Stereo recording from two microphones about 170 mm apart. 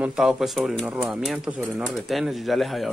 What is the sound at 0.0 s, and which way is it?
Speech, 5° right (ahead or behind).